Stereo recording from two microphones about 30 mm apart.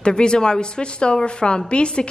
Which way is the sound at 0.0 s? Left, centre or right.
Left.